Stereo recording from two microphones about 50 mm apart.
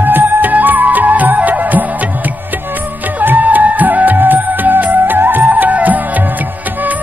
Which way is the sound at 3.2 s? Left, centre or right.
Right.